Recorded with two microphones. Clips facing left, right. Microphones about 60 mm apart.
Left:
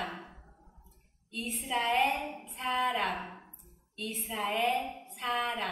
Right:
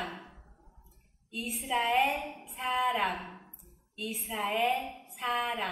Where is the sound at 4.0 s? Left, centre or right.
Centre.